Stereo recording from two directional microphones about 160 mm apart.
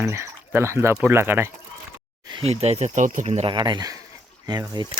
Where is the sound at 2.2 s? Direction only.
35° right (ahead or behind).